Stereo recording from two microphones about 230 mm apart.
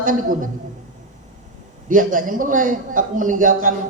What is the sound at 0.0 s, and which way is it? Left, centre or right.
Speech, right.